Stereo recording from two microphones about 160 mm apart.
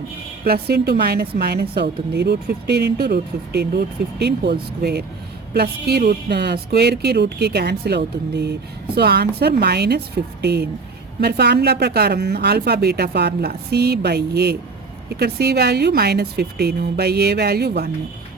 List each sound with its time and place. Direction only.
0.4 s a woman's voice: 80° right